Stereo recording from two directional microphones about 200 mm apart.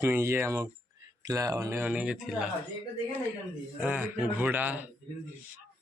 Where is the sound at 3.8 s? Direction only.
5° right (ahead or behind).